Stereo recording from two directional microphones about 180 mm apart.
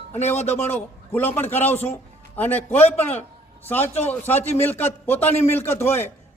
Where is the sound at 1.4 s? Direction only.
10° left (ahead or behind).